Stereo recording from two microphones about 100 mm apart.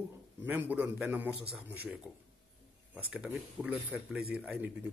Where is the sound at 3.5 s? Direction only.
15° right (ahead or behind).